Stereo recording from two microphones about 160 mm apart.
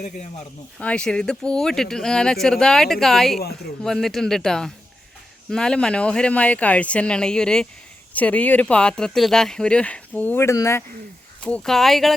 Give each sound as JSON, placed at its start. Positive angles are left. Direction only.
{"t": 0.8, "sound": "speech", "side_deg": 5}
{"t": 11.4, "sound": "speech", "side_deg": 5}